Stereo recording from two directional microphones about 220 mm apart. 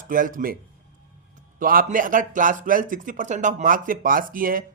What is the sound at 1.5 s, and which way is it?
Speech, 40° right (ahead or behind).